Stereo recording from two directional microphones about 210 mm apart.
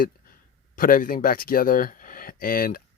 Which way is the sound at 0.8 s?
40° left (ahead or behind).